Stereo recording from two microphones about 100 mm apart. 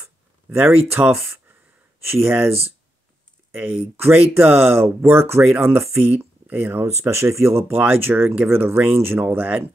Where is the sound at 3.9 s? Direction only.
20° right (ahead or behind).